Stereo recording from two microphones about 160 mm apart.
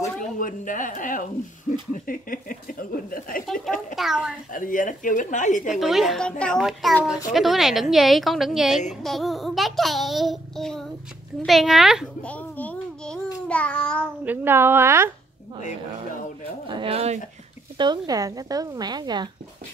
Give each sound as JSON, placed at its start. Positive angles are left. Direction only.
{"t": 0.2, "sound": "speech", "side_deg": 55}
{"t": 3.9, "sound": "a child's voice", "side_deg": 0}
{"t": 4.6, "sound": "speech", "side_deg": 55}
{"t": 5.7, "sound": "child singing", "side_deg": 0}
{"t": 12.3, "sound": "babbling", "side_deg": 10}
{"t": 13.5, "sound": "child singing", "side_deg": 5}
{"t": 14.2, "sound": "a woman's voice", "side_deg": -10}
{"t": 16.6, "sound": "speech", "side_deg": -30}
{"t": 17.7, "sound": "a woman's voice", "side_deg": -25}